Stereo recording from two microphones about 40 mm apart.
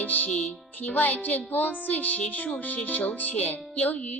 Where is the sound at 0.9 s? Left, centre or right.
Left.